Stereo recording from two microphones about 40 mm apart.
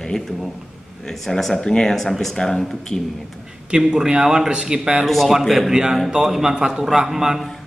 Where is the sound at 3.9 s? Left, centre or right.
Right.